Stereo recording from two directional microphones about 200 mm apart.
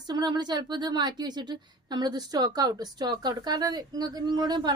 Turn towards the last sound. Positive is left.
turn(degrees=-20)  # may be behind; listen again after turning